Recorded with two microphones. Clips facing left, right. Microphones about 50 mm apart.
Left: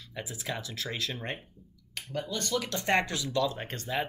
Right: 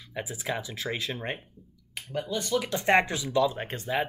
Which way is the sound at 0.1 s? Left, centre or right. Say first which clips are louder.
Right 4 dB; centre.